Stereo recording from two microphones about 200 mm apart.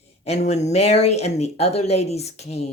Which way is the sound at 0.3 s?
35° left (ahead or behind).